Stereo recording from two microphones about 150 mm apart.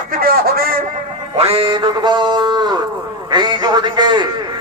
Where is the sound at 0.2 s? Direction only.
80° right.